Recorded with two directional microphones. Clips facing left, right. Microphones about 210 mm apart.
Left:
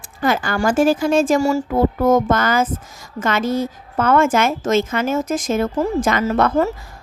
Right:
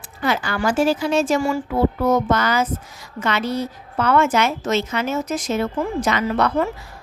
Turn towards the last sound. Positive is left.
turn(degrees=45)  # may be behind; listen again after turning